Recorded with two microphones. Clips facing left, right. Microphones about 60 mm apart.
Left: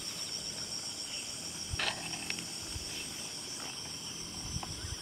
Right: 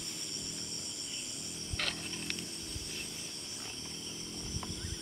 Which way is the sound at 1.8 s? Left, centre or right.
Left.